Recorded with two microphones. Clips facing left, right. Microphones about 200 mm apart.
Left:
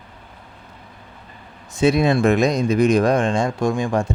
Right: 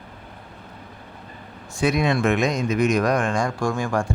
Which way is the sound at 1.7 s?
25° left (ahead or behind).